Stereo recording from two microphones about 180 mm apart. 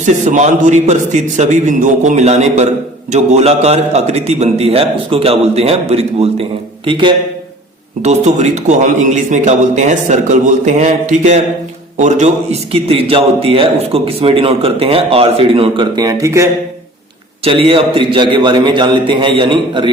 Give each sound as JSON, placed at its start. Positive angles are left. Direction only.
{"t": 0.0, "sound": "a man's voice", "side_deg": -40}
{"t": 8.0, "sound": "a man's voice", "side_deg": -40}
{"t": 17.4, "sound": "a man's voice", "side_deg": -30}